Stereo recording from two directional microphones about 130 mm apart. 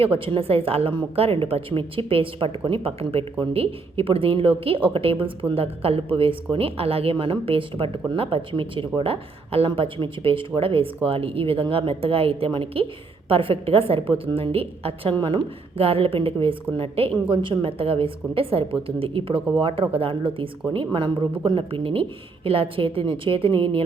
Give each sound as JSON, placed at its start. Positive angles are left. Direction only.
{"t": 0.3, "sound": "a woman's voice", "side_deg": -45}